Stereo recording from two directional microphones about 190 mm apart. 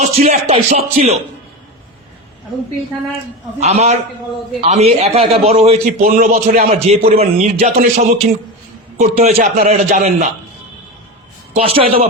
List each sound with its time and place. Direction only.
0.0 s speech: 40° right (ahead or behind)
3.6 s speech: 35° right (ahead or behind)
6.0 s a man's voice: 45° right (ahead or behind)
6.7 s speech: 30° right (ahead or behind)
11.5 s speech: 30° right (ahead or behind)